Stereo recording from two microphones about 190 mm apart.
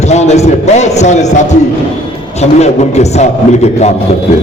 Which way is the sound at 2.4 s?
35° left (ahead or behind).